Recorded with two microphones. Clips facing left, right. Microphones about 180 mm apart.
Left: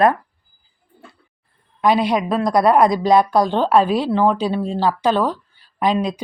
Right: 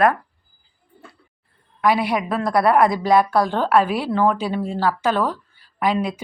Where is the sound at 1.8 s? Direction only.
20° left (ahead or behind).